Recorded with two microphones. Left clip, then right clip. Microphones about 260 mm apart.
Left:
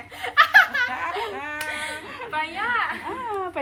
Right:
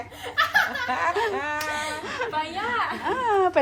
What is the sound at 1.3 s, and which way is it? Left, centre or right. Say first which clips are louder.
Speech: right 4 dB; right.